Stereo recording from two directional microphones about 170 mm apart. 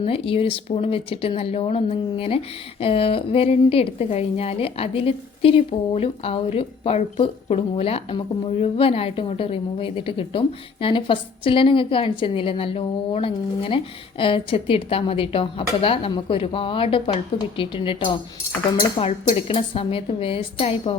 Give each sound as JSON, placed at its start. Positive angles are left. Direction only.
{"t": 0.0, "sound": "a woman's voice", "side_deg": 35}